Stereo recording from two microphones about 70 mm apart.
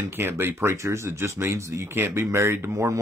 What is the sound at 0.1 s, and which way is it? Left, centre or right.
Speech, right.